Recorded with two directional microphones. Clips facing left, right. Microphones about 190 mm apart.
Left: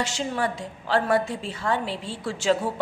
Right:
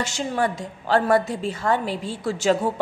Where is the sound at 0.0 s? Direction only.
45° right (ahead or behind).